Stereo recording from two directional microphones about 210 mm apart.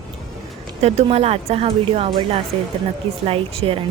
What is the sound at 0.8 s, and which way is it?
Speech, 30° right (ahead or behind).